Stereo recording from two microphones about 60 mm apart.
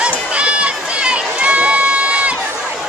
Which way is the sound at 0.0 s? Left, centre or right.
Centre.